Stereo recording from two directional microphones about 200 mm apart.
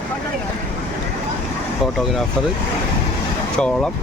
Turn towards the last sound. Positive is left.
turn(degrees=5)  # may be behind; listen again after turning